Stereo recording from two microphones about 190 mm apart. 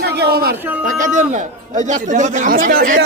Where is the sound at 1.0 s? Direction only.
40° right (ahead or behind).